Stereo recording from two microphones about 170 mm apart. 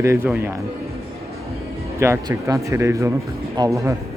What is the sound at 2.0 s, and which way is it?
Speech, 15° right (ahead or behind).